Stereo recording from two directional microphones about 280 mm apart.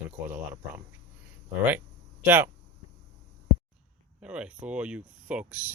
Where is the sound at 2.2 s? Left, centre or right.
Centre.